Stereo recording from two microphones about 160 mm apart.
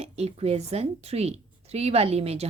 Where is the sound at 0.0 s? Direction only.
40° right (ahead or behind).